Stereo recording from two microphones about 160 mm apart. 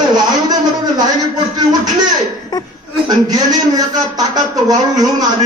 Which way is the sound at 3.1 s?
25° right (ahead or behind).